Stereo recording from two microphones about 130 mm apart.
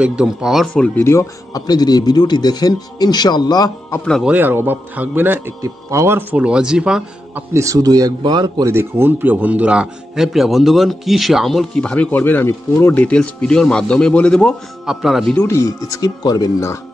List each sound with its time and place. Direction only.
0.0 s a man's voice: 5° right (ahead or behind)
1.0 s speech: 25° left (ahead or behind)
4.2 s a man's voice: 10° right (ahead or behind)
7.5 s speech: 25° right (ahead or behind)
8.7 s a man's voice: 15° right (ahead or behind); by 15.3 s centre (ahead or behind)
15.3 s speech: 25° left (ahead or behind)